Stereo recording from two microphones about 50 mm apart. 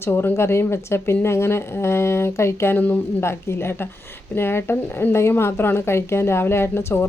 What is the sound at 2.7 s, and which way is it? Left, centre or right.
Speech, left.